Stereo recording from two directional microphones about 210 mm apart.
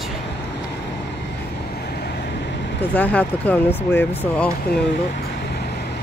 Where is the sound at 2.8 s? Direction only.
5° left (ahead or behind).